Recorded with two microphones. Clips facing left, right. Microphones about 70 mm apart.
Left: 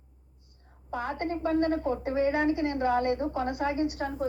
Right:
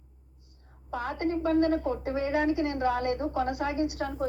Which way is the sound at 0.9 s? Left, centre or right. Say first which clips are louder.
Right 1 dB; centre.